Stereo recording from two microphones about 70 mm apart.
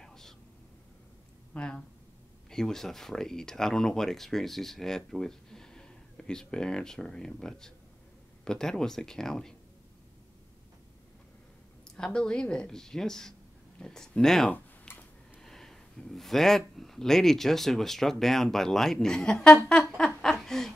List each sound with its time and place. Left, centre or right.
0.0 s whispering: centre
1.5 s speech: centre
11.9 s speech: centre
14.5 s tick-tock: left
15.4 s speech: centre
20.2 s a sound: centre